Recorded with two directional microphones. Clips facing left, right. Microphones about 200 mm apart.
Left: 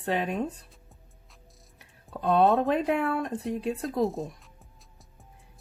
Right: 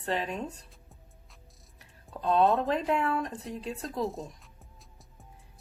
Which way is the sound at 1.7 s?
60° left (ahead or behind).